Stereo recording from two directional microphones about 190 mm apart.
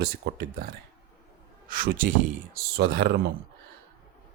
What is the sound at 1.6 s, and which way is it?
Speech, 50° right (ahead or behind).